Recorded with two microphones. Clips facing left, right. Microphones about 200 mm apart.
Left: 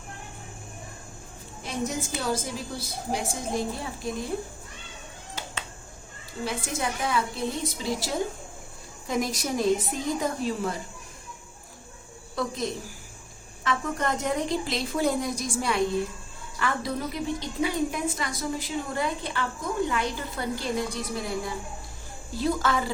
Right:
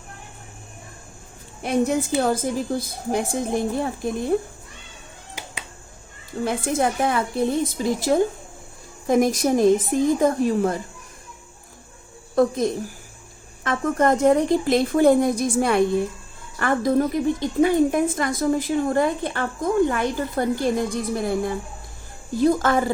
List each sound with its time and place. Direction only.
1.6 s a woman's voice: 60° right (ahead or behind)
5.3 s finger snapping: 10° right (ahead or behind)
6.4 s a woman's voice: 50° right (ahead or behind)
9.0 s a woman's voice: 50° right (ahead or behind)
12.4 s a woman's voice: 50° right (ahead or behind)